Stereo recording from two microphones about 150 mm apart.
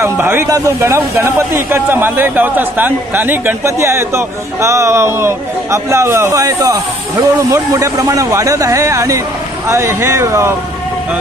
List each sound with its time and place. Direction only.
0.0 s speech: 15° right (ahead or behind)